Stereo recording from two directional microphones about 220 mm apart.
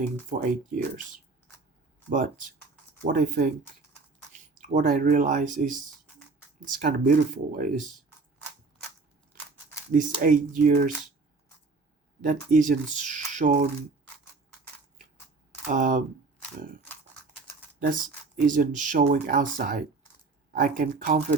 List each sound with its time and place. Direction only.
0.3 s speech: 35° right (ahead or behind)
2.0 s speech: 35° right (ahead or behind)
9.9 s speech: 35° right (ahead or behind)
12.2 s speech: 35° right (ahead or behind)
15.6 s speech: 35° right (ahead or behind)